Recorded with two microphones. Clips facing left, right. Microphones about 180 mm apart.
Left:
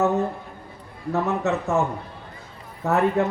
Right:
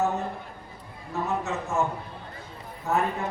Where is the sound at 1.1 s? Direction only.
65° left (ahead or behind).